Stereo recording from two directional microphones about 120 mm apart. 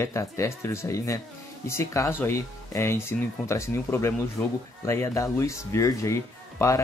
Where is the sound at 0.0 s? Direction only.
25° left (ahead or behind).